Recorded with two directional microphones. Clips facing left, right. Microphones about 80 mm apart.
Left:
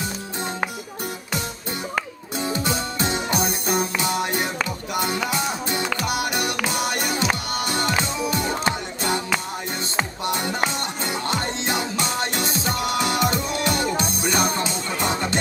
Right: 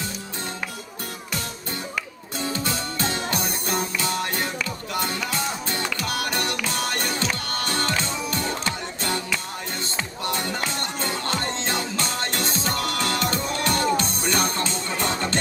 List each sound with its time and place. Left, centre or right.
2.4 s music: centre
10.2 s music: centre